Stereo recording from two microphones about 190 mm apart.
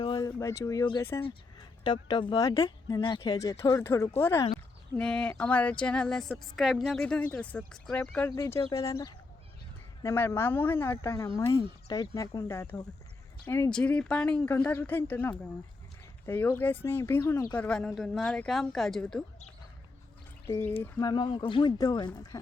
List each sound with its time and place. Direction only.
0.0 s speech: 20° left (ahead or behind); by 7.0 s centre (ahead or behind)
7.0 s speech: 10° left (ahead or behind)
17.7 s speech: 5° left (ahead or behind)
20.5 s speech: 10° left (ahead or behind)